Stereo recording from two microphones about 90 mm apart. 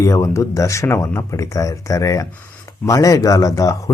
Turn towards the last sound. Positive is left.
turn(degrees=40)  # may be behind; listen again after turning